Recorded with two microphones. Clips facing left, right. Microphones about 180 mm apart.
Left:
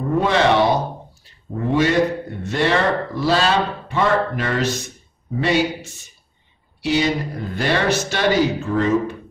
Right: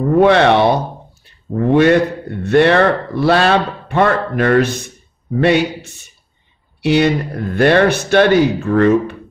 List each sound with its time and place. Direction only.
0.2 s speech: 65° right (ahead or behind)
1.2 s a sound: 60° right (ahead or behind)
2.4 s a man's voice: 60° right (ahead or behind)